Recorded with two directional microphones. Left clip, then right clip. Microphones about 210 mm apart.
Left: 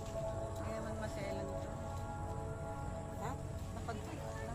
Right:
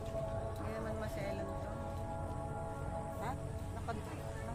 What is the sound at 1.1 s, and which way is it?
Music, 35° right (ahead or behind).